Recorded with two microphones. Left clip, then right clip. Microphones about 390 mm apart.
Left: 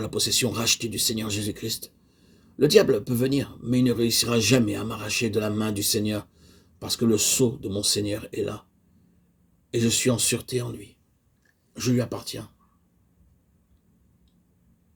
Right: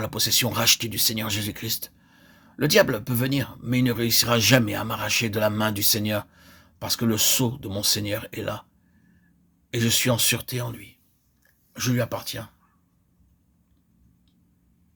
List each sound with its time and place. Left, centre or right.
0.0 s speech: right
9.7 s speech: right